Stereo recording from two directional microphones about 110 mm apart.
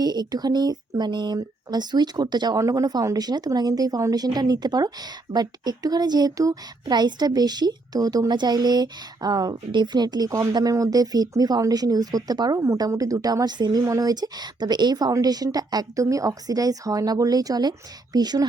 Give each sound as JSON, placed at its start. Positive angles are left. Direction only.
{"t": 0.0, "sound": "speech", "side_deg": -40}